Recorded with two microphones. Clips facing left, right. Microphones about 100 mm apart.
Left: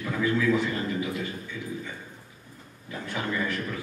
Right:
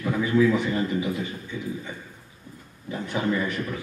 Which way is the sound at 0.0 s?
20° right (ahead or behind).